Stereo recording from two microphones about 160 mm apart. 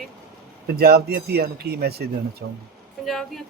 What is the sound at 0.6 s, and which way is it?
Speech, 75° right (ahead or behind).